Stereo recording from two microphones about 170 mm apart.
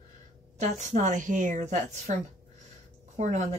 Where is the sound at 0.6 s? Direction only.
45° right (ahead or behind).